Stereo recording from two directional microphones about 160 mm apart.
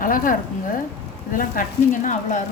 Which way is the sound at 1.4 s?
55° left (ahead or behind).